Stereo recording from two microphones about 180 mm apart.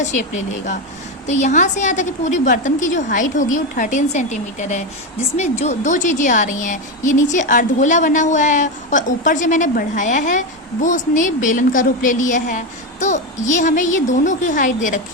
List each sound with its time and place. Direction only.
1.3 s a woman's voice: 40° left (ahead or behind)